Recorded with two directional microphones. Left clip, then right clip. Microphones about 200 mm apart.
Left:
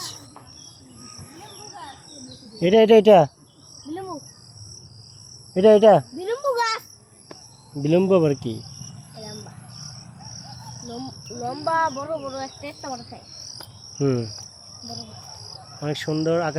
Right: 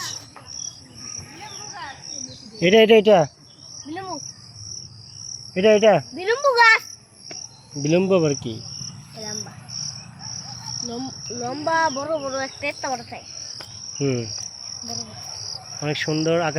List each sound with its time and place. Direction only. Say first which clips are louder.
2.6 s speech: right 1 dB; 5° left (ahead or behind)
3.0 s speech: left 2 dB; 25° left (ahead or behind)
6.1 s a sound: right 6 dB; 20° right (ahead or behind)
7.8 s speech: even; 15° left (ahead or behind)
11.4 s speech: right 1 dB; 55° right (ahead or behind)
12.0 s speech: right 4 dB; 30° right (ahead or behind)
14.0 s speech: left 1 dB; 15° left (ahead or behind)
15.8 s speech: right 2 dB; centre (ahead or behind)